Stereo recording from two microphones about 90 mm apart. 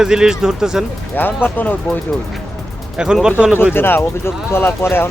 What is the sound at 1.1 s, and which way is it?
Speech, 20° left (ahead or behind).